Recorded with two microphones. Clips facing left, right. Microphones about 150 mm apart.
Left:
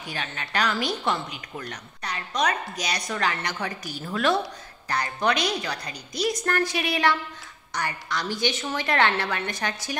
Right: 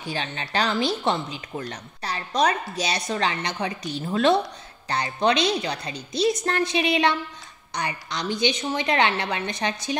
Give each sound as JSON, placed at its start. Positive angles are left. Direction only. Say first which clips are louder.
{"t": 0.0, "sound": "a woman's voice", "louder": "right 4 dB", "side_deg": -30}